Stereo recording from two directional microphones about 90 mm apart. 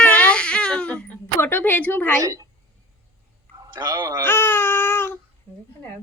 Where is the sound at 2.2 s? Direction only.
35° right (ahead or behind).